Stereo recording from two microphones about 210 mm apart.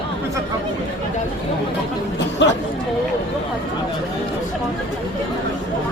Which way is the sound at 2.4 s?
55° left (ahead or behind).